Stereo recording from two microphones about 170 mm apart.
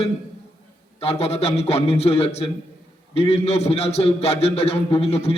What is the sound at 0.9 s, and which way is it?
A man's voice, 35° left (ahead or behind).